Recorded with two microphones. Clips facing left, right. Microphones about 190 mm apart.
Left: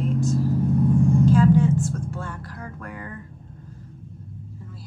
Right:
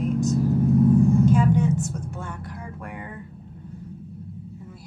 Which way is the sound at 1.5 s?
20° right (ahead or behind).